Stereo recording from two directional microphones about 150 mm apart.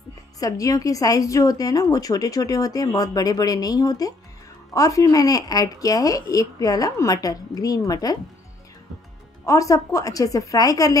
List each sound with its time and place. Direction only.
0.4 s a woman's voice: 20° left (ahead or behind)
9.5 s a woman's voice: 20° left (ahead or behind)